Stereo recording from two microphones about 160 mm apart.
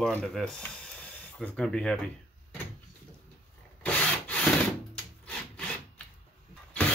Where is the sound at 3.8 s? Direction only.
10° left (ahead or behind).